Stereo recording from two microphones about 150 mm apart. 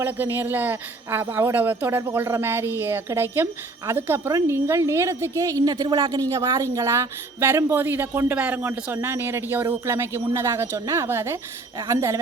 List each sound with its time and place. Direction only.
0.0 s speech: 15° right (ahead or behind)